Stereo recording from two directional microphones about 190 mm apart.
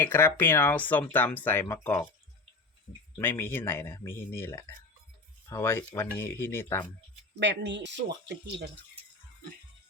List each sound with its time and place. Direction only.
0.0 s speech: 10° left (ahead or behind)
3.2 s speech: 10° left (ahead or behind)
7.3 s speech: 70° right (ahead or behind)